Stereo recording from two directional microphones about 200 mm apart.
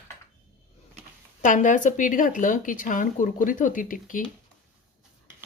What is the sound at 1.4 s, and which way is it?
A woman's voice, 40° left (ahead or behind).